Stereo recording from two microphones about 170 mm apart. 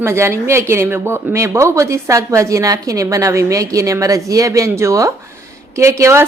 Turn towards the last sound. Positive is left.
turn(degrees=-15)  # may be behind; listen again after turning